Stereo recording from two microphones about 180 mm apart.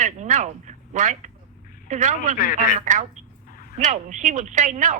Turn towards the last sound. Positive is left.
turn(degrees=-45)  # may be behind; listen again after turning